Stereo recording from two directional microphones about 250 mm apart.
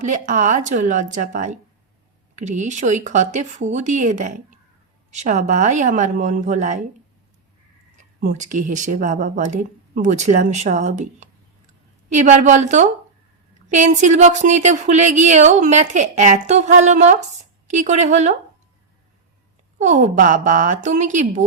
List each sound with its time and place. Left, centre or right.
0.0 s speech: right
8.2 s a woman's voice: right
19.8 s a woman's voice: right